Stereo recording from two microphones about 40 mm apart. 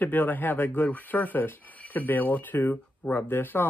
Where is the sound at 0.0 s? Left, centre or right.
Left.